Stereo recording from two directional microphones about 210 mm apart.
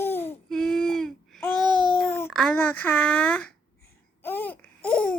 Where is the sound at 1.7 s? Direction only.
20° right (ahead or behind).